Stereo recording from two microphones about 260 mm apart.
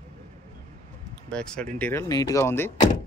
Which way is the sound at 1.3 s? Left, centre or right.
Centre.